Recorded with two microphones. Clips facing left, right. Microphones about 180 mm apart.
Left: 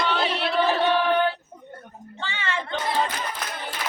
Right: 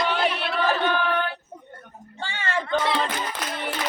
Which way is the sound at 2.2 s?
45° right (ahead or behind).